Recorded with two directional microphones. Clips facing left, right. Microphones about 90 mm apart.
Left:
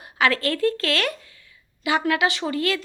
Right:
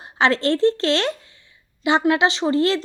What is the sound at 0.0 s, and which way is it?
A woman's voice, 25° right (ahead or behind).